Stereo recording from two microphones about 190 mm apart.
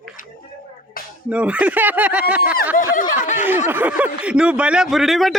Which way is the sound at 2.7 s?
45° left (ahead or behind).